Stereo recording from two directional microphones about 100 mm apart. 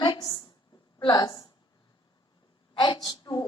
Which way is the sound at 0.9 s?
40° left (ahead or behind).